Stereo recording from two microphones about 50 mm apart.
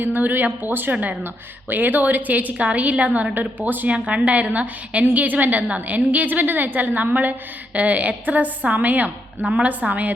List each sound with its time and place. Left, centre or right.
0.0 s a woman's voice: right
3.3 s a woman's voice: right
3.8 s a woman's voice: right